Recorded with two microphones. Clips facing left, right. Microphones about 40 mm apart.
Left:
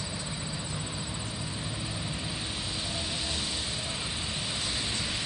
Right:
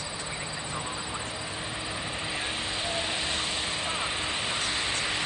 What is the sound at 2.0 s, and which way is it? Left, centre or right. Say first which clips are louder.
Vehicle: right 3 dB; right.